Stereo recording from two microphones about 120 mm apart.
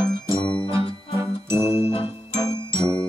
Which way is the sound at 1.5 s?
20° right (ahead or behind).